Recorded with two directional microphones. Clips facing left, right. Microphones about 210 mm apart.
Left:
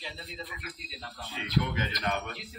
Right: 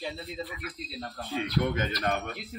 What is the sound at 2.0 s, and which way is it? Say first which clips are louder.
Speech: right 1 dB; 35° right (ahead or behind).